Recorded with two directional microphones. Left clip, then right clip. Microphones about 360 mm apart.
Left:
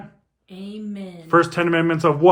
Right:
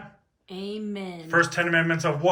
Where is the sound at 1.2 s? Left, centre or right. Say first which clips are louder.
Left 5 dB; centre.